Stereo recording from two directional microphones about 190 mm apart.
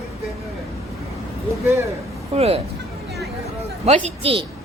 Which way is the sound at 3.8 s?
35° right (ahead or behind).